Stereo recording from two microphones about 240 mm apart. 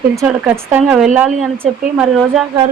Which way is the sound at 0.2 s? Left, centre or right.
Centre.